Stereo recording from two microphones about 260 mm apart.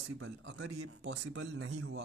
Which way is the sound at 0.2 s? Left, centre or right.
Right.